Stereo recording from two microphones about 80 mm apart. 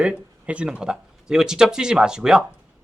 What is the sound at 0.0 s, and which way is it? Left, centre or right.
Speech, centre.